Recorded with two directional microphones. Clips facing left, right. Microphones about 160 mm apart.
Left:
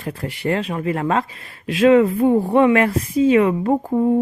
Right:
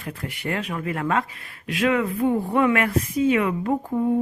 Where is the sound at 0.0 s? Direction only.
30° left (ahead or behind).